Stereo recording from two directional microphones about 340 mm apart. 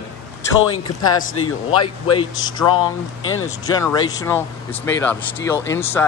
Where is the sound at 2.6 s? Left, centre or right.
Centre.